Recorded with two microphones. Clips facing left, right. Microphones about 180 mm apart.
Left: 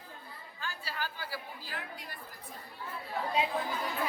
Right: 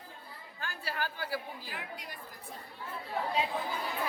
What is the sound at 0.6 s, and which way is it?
Speech, 55° right (ahead or behind).